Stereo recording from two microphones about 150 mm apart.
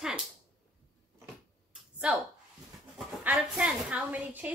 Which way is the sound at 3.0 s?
5° right (ahead or behind).